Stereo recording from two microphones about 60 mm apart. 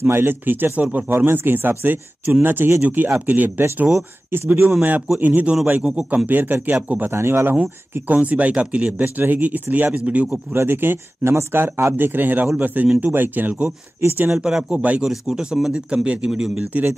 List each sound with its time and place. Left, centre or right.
0.0 s speech: right
5.2 s speech: right
5.9 s speech: centre
6.2 s speech: right
7.1 s speech: right
7.9 s speech: right
10.5 s speech: right
14.3 s speech: centre
15.0 s speech: centre
16.7 s speech: right